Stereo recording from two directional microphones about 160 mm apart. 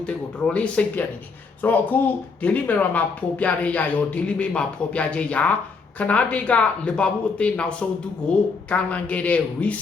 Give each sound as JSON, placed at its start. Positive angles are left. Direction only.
{"t": 0.0, "sound": "speech", "side_deg": 5}